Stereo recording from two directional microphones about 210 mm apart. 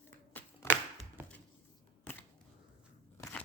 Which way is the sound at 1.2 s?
10° right (ahead or behind).